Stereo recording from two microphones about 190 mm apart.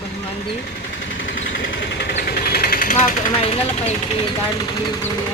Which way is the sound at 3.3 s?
30° left (ahead or behind).